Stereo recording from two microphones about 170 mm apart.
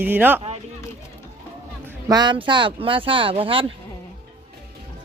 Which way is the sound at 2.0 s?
25° right (ahead or behind).